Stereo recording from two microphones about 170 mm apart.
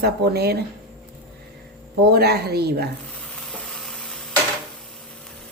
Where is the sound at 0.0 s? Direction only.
70° right (ahead or behind).